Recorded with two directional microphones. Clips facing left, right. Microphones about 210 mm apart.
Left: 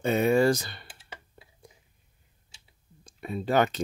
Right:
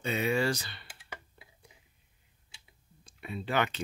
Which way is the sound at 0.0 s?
50° left (ahead or behind).